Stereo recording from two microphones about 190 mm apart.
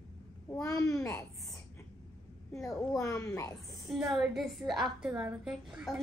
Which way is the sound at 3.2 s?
15° left (ahead or behind).